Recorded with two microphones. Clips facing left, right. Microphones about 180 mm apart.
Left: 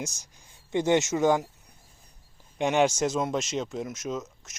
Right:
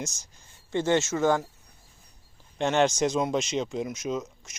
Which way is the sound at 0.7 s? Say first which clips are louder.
Left 1 dB; 15° left (ahead or behind).